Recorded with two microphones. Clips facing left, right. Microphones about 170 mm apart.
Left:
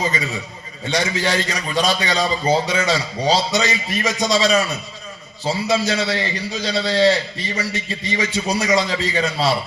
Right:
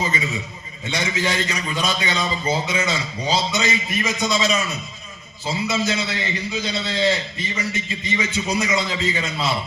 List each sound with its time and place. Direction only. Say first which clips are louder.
0.9 s a man's voice: left 3 dB; 35° left (ahead or behind)
5.6 s a man's voice: left 4 dB; 35° left (ahead or behind)